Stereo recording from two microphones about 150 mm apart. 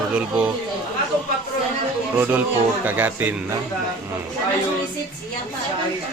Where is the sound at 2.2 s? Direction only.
15° right (ahead or behind).